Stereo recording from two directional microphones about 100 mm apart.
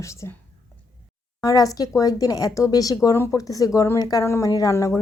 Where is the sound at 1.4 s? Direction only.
35° left (ahead or behind).